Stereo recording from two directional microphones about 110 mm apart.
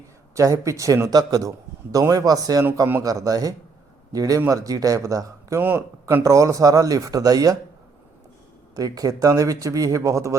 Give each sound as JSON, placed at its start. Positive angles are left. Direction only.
{"t": 0.3, "sound": "speech", "side_deg": -25}
{"t": 8.7, "sound": "speech", "side_deg": -35}